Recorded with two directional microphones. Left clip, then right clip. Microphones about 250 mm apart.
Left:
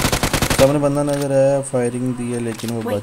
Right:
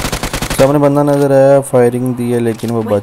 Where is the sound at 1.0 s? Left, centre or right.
Centre.